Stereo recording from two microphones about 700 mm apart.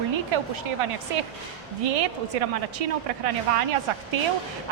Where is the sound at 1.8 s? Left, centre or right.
Right.